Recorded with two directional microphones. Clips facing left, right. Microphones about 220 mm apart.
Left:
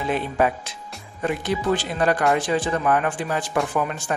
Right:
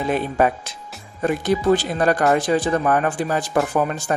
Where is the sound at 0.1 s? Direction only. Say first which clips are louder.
Right 2 dB; 45° right (ahead or behind).